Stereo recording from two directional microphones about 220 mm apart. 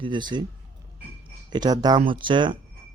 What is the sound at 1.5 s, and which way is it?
Speech, 20° right (ahead or behind).